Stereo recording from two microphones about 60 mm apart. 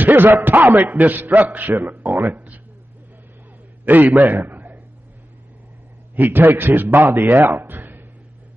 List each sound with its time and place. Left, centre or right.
0.0 s a man's voice: right
3.8 s a man's voice: right
6.1 s a man's voice: right